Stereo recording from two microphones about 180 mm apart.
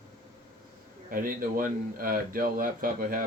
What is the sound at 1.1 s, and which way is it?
Speech, 50° right (ahead or behind).